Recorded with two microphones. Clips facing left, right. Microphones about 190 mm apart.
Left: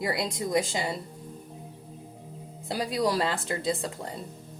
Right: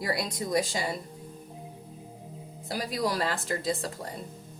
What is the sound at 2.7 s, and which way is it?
Speech, 25° left (ahead or behind).